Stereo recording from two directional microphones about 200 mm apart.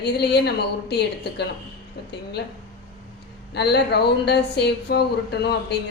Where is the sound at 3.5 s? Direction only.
55° left (ahead or behind).